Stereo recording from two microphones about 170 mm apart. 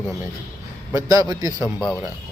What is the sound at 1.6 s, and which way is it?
Speech, 5° right (ahead or behind).